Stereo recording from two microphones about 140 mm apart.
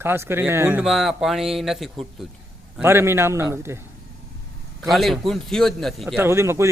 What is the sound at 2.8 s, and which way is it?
Speech, 20° right (ahead or behind).